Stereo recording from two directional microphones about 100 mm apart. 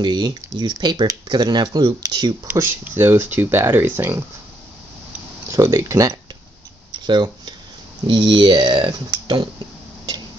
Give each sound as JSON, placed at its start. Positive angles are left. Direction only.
{"t": 0.0, "sound": "speech", "side_deg": -45}
{"t": 2.4, "sound": "speech", "side_deg": -25}
{"t": 5.5, "sound": "speech", "side_deg": -30}
{"t": 6.9, "sound": "tick-tock", "side_deg": -45}
{"t": 8.1, "sound": "speech", "side_deg": -50}